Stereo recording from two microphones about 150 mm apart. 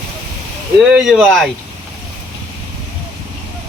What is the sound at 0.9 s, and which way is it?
Speech, centre (ahead or behind).